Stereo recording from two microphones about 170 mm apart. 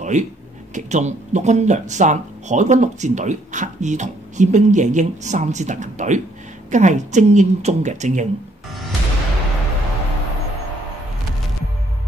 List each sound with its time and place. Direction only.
0.1 s speech: 45° right (ahead or behind)